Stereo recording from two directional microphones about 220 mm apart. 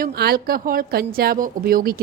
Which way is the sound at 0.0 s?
45° right (ahead or behind).